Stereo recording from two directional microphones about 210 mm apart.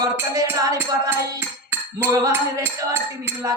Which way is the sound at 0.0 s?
15° right (ahead or behind).